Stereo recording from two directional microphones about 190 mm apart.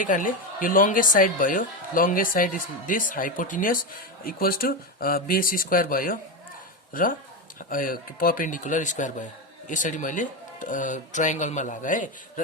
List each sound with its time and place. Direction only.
0.0 s speech: 45° left (ahead or behind)